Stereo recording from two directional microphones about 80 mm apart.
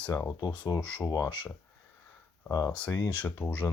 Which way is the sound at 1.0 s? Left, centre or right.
Left.